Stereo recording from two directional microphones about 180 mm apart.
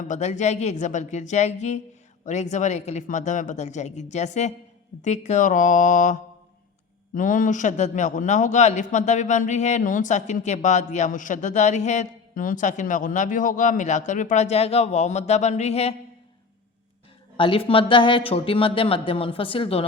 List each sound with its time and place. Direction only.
0.1 s a man's voice: 40° left (ahead or behind)
17.3 s speech: 30° left (ahead or behind)